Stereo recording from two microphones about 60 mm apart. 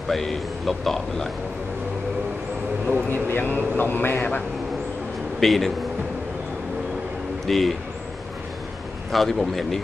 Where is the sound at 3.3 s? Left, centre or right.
Left.